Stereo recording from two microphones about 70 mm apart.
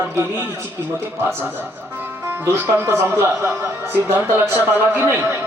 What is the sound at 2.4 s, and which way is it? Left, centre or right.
A man's voice, right.